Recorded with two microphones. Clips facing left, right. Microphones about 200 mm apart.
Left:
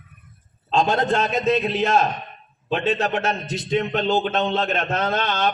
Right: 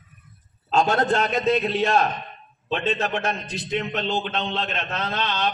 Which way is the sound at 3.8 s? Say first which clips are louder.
Left 5 dB; 40° left (ahead or behind).